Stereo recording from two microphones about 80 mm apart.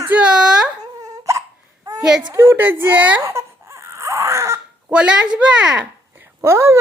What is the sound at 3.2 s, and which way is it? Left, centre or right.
Baby cry, right.